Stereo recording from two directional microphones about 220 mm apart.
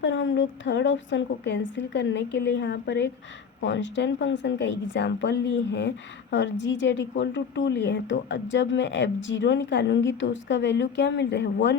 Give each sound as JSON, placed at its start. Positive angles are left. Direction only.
{"t": 0.0, "sound": "a woman's voice", "side_deg": 55}